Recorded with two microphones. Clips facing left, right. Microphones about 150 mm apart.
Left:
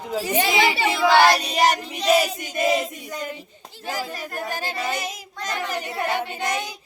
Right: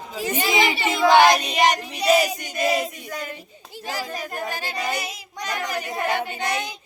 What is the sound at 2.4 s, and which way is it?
Choir, centre (ahead or behind).